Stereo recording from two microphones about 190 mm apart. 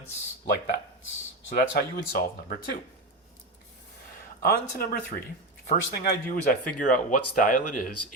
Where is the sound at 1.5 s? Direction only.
50° left (ahead or behind).